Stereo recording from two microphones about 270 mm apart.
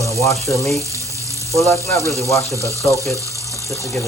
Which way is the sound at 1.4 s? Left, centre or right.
Centre.